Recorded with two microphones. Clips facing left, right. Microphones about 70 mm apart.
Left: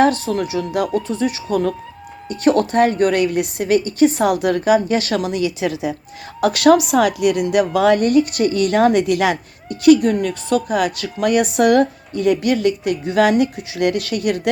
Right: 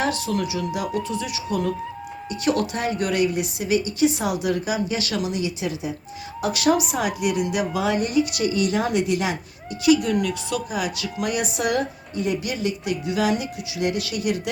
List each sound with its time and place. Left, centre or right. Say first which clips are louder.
0.0 s a woman's voice: left 8 dB; left
9.6 s a woman's voice: left 7 dB; left